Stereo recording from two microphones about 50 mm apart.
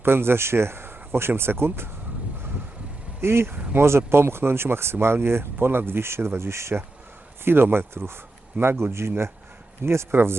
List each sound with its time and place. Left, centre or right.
0.0 s speech: right
3.2 s speech: right
3.5 s speech: right
3.8 s speech: right
7.4 s speech: right
10.1 s speech: right